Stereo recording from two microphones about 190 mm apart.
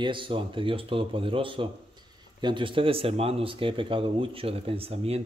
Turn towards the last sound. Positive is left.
turn(degrees=-30)  # may be behind; listen again after turning